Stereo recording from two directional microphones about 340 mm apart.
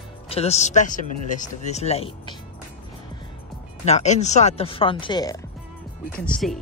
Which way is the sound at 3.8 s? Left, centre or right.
Centre.